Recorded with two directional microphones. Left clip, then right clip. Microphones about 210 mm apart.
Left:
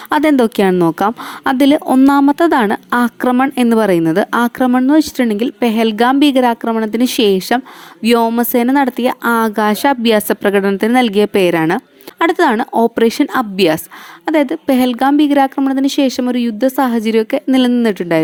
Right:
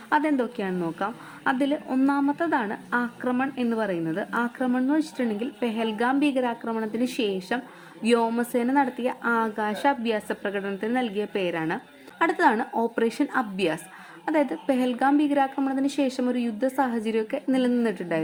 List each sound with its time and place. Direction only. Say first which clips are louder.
0.1 s a woman's voice: left 11 dB; 50° left (ahead or behind)